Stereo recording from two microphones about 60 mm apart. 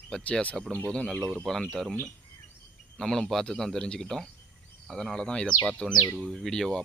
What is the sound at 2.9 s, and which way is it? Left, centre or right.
Speech, centre.